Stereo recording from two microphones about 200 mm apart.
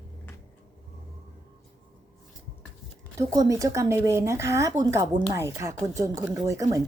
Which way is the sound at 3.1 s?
15° right (ahead or behind).